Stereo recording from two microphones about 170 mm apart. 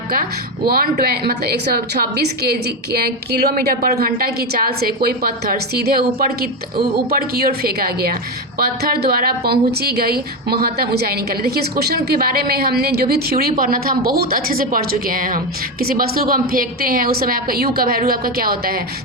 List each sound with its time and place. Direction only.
0.1 s a woman's voice: 60° right (ahead or behind)